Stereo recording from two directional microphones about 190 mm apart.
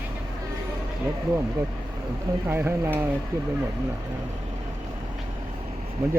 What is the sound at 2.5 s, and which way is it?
Speech, 10° right (ahead or behind).